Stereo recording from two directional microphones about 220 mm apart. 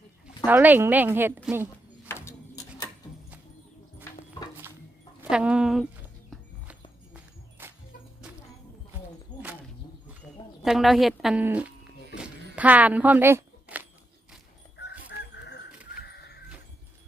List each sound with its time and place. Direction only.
0.3 s speech: 5° right (ahead or behind)
2.0 s a sound: 10° left (ahead or behind)
5.2 s speech: 5° right (ahead or behind)
7.6 s music: 10° right (ahead or behind)
9.3 s a sound: 30° left (ahead or behind)
10.6 s speech: centre (ahead or behind)
12.1 s a sound: 5° right (ahead or behind)
14.8 s chicken: 50° left (ahead or behind)
16.0 s horse: 50° left (ahead or behind)